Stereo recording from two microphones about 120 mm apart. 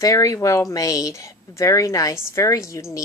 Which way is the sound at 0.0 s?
30° left (ahead or behind).